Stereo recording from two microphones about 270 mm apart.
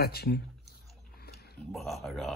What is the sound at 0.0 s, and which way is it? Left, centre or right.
Speech, left.